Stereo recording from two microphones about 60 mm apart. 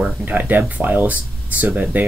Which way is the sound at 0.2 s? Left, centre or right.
Right.